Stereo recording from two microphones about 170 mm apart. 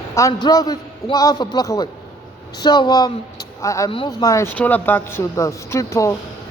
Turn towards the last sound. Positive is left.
turn(degrees=20)  # may be behind; listen again after turning